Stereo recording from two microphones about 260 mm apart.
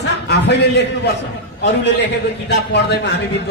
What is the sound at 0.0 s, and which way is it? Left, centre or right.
A man's voice, left.